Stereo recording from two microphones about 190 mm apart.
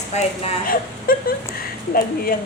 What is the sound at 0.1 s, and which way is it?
Speech, 35° left (ahead or behind).